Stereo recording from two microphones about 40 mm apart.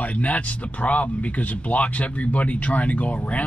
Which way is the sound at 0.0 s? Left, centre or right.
Left.